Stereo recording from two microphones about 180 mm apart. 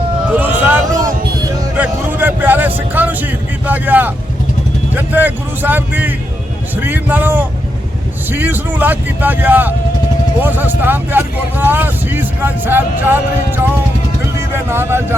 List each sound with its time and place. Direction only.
0.3 s a sound: 10° right (ahead or behind)
1.8 s vehicle: 10° right (ahead or behind)
3.7 s speech: 10° right (ahead or behind)
14.7 s speech: 15° right (ahead or behind)